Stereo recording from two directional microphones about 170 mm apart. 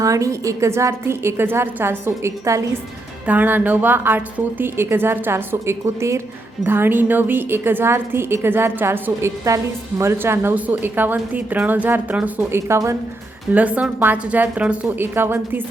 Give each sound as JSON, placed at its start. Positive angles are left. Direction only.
{"t": 0.0, "sound": "a woman's voice", "side_deg": -20}